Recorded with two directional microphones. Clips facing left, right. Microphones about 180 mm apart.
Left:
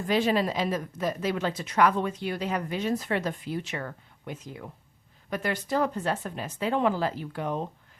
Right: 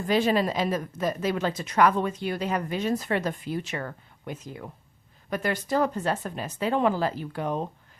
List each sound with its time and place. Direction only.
0.1 s a woman's voice: 45° right (ahead or behind)